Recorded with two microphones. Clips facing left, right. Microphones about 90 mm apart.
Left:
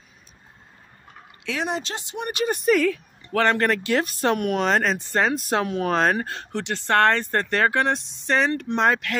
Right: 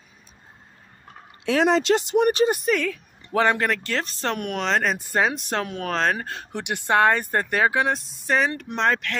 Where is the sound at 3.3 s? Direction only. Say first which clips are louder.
Even; 15° right (ahead or behind).